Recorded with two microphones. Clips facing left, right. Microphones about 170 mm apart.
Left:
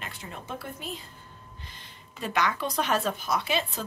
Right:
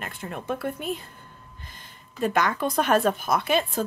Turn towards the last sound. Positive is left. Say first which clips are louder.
# right 5 dB
turn(degrees=-50)  # may be behind; listen again after turning